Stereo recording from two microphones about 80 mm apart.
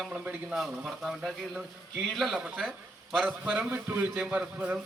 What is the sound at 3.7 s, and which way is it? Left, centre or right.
A man's voice, right.